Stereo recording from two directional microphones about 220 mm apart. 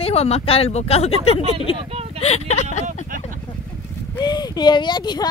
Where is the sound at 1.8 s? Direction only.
25° right (ahead or behind).